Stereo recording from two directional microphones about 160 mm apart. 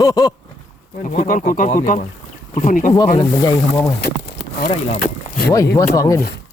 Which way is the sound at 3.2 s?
25° left (ahead or behind).